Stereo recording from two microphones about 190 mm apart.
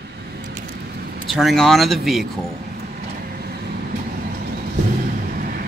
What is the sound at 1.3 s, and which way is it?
Speech, centre (ahead or behind).